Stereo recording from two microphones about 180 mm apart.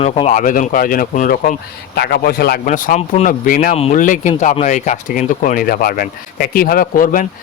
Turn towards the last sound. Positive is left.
turn(degrees=50)  # may be behind; listen again after turning